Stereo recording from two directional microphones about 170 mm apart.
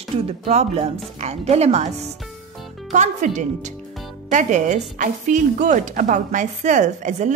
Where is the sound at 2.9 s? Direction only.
45° right (ahead or behind).